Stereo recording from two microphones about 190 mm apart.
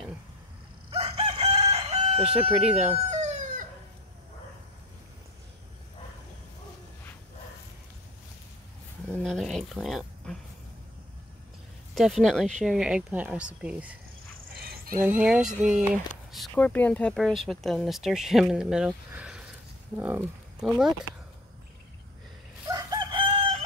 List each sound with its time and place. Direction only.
0.8 s crowing: 30° right (ahead or behind)
2.5 s speech: 5° right (ahead or behind)
2.9 s howl: 35° right (ahead or behind)
9.2 s a sound: centre (ahead or behind)
11.9 s speech: centre (ahead or behind)
15.0 s speech: 5° right (ahead or behind)
22.7 s chicken: 20° right (ahead or behind)